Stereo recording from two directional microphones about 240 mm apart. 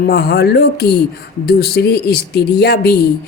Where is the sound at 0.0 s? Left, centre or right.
Left.